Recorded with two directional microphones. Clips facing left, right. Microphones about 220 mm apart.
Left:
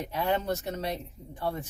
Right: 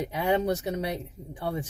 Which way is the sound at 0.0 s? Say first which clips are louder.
Right 3 dB; 15° right (ahead or behind).